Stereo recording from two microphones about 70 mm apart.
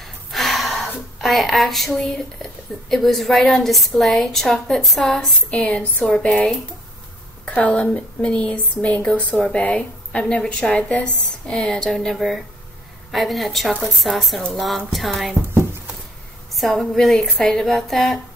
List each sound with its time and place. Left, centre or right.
0.0 s a sound: centre
2.9 s a woman's voice: centre
5.5 s a woman's voice: centre
16.5 s a woman's voice: centre